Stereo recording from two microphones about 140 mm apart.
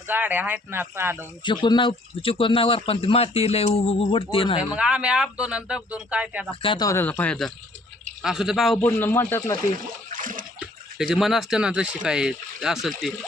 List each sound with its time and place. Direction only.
0.1 s speech: 15° right (ahead or behind)
1.5 s speech: 35° left (ahead or behind)
4.7 s speech: 5° right (ahead or behind)
6.6 s speech: 40° left (ahead or behind)
6.8 s speech: 15° left (ahead or behind); by 8.8 s centre (ahead or behind)
8.8 s speech: 15° left (ahead or behind)
10.1 s water: 75° right (ahead or behind)
10.9 s speech: 5° right (ahead or behind)